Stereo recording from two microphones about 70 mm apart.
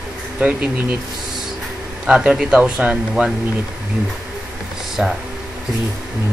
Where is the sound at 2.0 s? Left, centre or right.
Centre.